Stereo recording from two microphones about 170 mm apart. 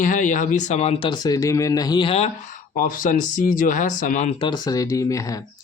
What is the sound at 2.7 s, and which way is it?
A man's voice, 50° left (ahead or behind).